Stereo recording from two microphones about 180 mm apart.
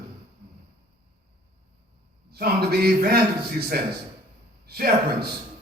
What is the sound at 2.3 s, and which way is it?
A man's voice, 60° right (ahead or behind).